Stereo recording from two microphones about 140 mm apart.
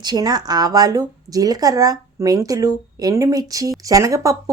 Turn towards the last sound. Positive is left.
turn(degrees=-20)  # may be behind; listen again after turning